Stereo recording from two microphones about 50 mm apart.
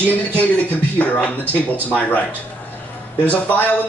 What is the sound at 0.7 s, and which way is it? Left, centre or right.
A man's voice, left.